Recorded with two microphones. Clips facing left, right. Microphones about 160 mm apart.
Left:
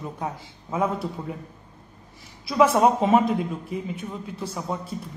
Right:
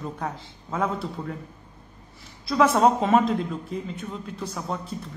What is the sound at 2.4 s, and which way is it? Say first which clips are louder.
A woman's voice: left 1 dB; 10° left (ahead or behind).